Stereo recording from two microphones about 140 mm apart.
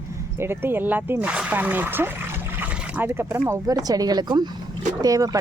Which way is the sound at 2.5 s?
15° right (ahead or behind).